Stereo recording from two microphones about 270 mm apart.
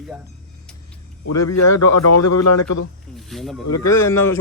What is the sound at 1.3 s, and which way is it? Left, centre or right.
A man's voice, left.